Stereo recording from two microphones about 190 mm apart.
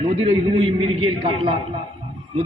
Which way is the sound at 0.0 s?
30° right (ahead or behind).